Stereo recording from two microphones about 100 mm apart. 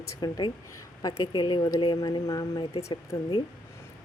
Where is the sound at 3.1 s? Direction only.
45° left (ahead or behind).